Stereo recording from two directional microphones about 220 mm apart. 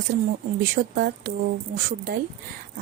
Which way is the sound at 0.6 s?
40° right (ahead or behind).